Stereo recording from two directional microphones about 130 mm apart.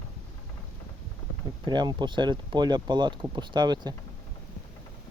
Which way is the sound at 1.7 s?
35° right (ahead or behind).